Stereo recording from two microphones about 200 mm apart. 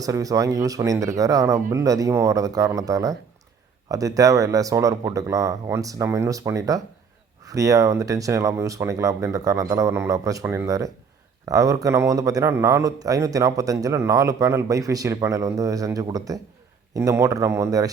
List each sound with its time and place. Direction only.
0.0 s a man's voice: 15° right (ahead or behind)